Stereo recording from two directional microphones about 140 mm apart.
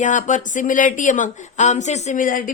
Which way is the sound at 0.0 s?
65° left (ahead or behind).